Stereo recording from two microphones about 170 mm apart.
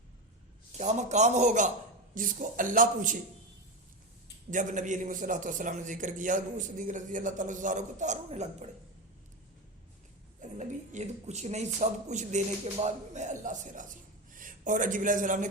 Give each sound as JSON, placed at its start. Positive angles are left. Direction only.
{"t": 0.7, "sound": "a man's voice", "side_deg": -45}
{"t": 4.5, "sound": "a man's voice", "side_deg": -50}
{"t": 10.4, "sound": "a man's voice", "side_deg": -45}